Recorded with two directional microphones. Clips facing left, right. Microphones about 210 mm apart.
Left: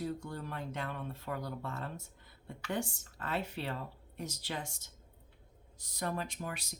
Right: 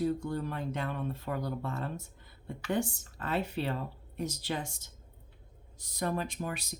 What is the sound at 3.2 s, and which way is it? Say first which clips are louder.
Speech: right 5 dB; 25° right (ahead or behind).